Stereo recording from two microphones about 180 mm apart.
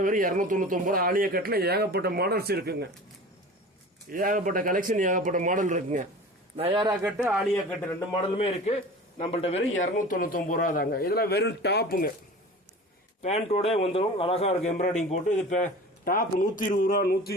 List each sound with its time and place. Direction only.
0.0 s a man's voice: 50° right (ahead or behind)
4.1 s speech: 50° right (ahead or behind)
6.6 s speech: 30° right (ahead or behind)
7.0 s speech: 5° right (ahead or behind)
8.1 s a man's voice: 35° left (ahead or behind); by 12.1 s 55° left (ahead or behind)
13.2 s a man's voice: 35° left (ahead or behind); by 17.3 s 60° left (ahead or behind)